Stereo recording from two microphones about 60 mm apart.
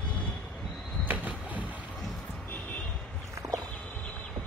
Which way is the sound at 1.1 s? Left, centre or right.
Right.